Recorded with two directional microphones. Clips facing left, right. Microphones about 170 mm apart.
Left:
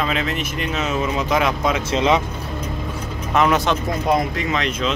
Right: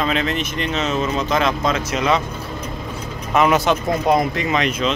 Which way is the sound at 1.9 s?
20° left (ahead or behind).